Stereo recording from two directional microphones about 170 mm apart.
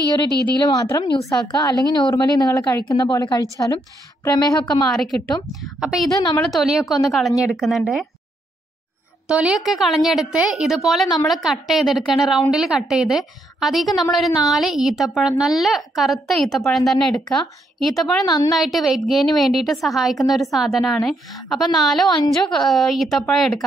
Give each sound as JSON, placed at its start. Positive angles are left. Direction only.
{"t": 0.6, "sound": "speech", "side_deg": 20}
{"t": 4.9, "sound": "a woman's voice", "side_deg": 5}
{"t": 9.3, "sound": "a woman's voice", "side_deg": -5}
{"t": 18.2, "sound": "speech", "side_deg": 25}
{"t": 18.5, "sound": "a woman's voice", "side_deg": 0}